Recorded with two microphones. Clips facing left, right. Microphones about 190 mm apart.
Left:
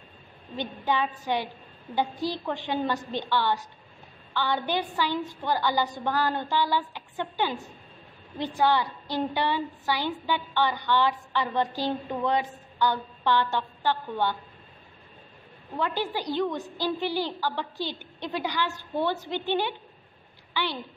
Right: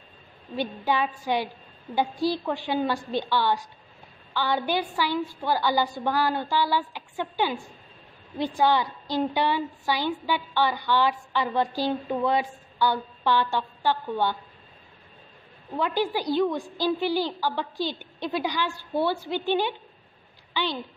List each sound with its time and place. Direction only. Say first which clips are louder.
0.6 s a woman's voice: right 2 dB; 10° right (ahead or behind)
15.8 s a woman's voice: right 3 dB; 15° right (ahead or behind)